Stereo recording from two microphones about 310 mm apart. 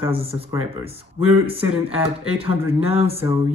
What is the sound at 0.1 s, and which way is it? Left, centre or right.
Speech, centre.